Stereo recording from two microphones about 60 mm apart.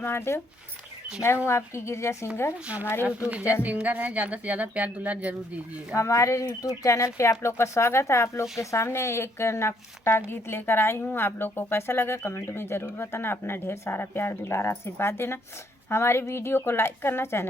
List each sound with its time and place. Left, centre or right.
0.0 s speech: left
1.5 s speech: left
3.5 s speech: right
5.9 s speech: left